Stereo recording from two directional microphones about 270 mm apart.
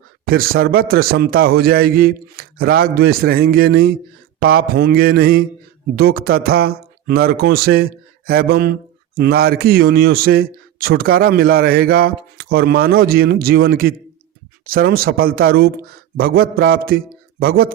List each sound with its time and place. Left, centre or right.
0.3 s a man's voice: right